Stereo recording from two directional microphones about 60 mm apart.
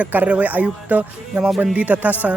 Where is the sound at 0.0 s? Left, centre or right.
Right.